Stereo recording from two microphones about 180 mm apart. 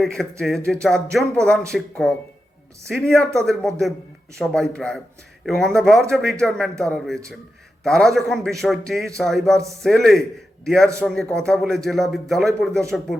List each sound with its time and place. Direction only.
0.0 s speech: centre (ahead or behind)